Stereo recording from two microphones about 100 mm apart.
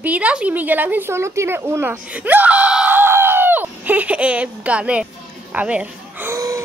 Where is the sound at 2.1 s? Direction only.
15° right (ahead or behind).